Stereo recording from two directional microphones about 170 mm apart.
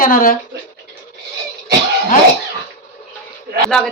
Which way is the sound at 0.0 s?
55° left (ahead or behind).